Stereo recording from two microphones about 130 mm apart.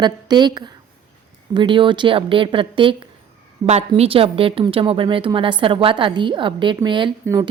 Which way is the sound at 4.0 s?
45° right (ahead or behind).